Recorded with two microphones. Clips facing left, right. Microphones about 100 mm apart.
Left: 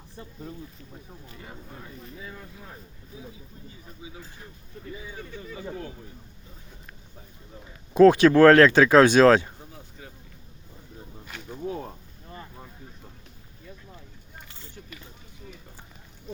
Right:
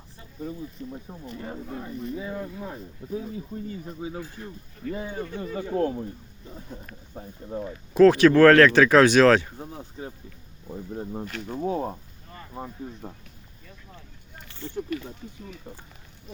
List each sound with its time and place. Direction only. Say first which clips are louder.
0.8 s speech: right 9 dB; 35° right (ahead or behind)
3.5 s speech: right 13 dB; 65° right (ahead or behind)
4.4 s speech: right 8 dB; 15° left (ahead or behind)
4.9 s speech: right 8 dB; 50° right (ahead or behind)
7.2 s speech: right 16 dB; 45° right (ahead or behind)
7.9 s speech: even; 20° left (ahead or behind)
9.6 s speech: right 8 dB; 40° right (ahead or behind)
10.7 s speech: right 14 dB; 55° right (ahead or behind)
11.6 s speech: right 5 dB; 35° right (ahead or behind)